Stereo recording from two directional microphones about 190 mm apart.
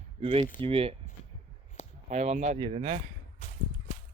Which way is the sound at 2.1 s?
35° right (ahead or behind).